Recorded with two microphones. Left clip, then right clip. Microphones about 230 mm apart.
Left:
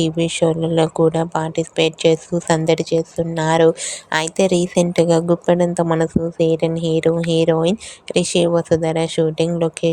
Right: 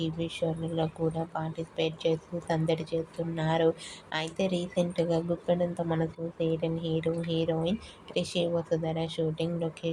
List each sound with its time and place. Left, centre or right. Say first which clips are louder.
0.0 s speech: left 14 dB; left